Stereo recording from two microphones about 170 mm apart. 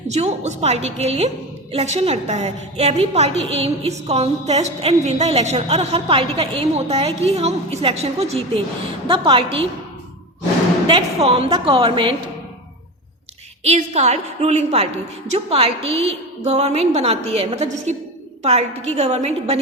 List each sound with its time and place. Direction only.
0.1 s a woman's voice: 40° right (ahead or behind)
10.8 s a woman's voice: 35° right (ahead or behind)
13.7 s a woman's voice: 40° right (ahead or behind)